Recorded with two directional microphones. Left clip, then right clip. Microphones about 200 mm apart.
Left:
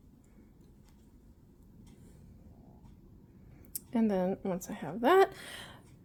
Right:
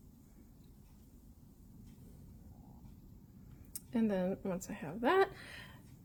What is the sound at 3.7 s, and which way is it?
Speech, 30° left (ahead or behind).